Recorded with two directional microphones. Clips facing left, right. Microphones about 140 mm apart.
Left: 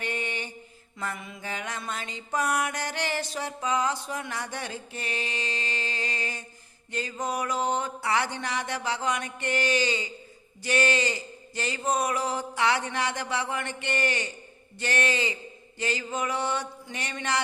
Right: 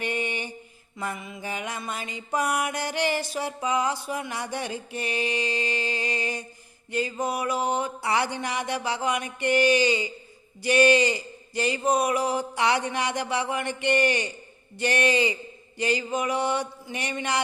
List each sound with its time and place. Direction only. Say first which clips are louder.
0.0 s mantra: right 3 dB; 15° right (ahead or behind)
0.9 s music: right 2 dB; 10° right (ahead or behind)